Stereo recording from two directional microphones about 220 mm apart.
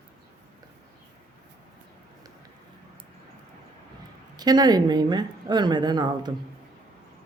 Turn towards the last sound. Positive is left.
turn(degrees=-20)  # may be behind; listen again after turning